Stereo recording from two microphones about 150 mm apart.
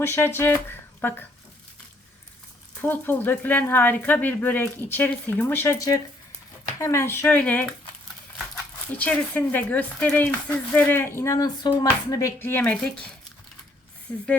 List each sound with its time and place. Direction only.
0.0 s speech: 15° left (ahead or behind)
2.8 s speech: 15° left (ahead or behind)
8.9 s speech: 10° left (ahead or behind)
14.1 s speech: 10° left (ahead or behind)